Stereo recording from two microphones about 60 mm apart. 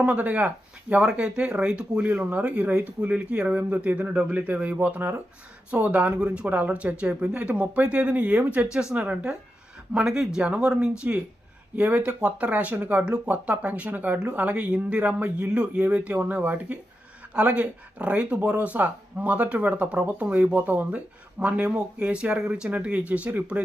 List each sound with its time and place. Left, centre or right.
0.0 s speech: right